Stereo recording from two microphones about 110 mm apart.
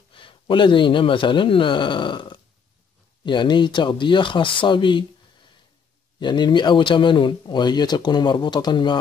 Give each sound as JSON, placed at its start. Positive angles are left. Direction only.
{"t": 0.1, "sound": "a man's voice", "side_deg": 50}
{"t": 6.1, "sound": "speech", "side_deg": 45}